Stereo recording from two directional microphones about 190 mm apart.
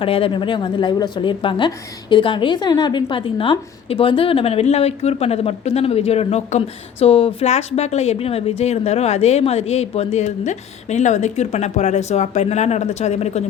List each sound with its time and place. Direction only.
0.0 s a woman's voice: 30° left (ahead or behind)